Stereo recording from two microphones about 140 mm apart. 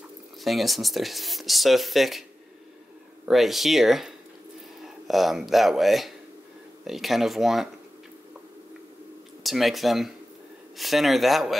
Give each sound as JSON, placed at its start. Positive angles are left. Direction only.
{"t": 0.4, "sound": "speech", "side_deg": 0}
{"t": 3.3, "sound": "speech", "side_deg": 0}
{"t": 9.4, "sound": "speech", "side_deg": 0}